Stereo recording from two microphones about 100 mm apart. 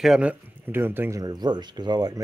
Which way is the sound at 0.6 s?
20° right (ahead or behind).